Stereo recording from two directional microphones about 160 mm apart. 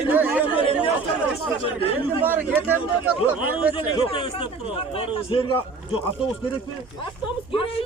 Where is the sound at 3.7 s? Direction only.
35° left (ahead or behind).